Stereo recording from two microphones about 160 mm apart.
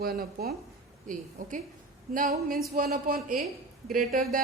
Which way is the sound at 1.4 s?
55° right (ahead or behind).